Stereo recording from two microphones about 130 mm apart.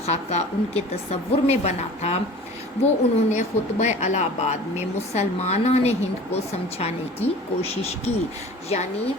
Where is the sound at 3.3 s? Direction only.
60° left (ahead or behind).